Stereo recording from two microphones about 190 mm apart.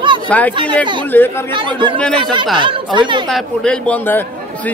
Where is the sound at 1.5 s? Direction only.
25° right (ahead or behind).